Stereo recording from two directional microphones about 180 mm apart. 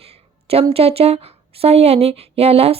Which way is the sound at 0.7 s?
35° right (ahead or behind).